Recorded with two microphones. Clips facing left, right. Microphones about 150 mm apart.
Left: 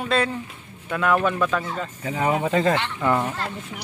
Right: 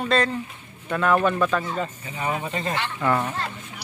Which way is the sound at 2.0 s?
75° left (ahead or behind).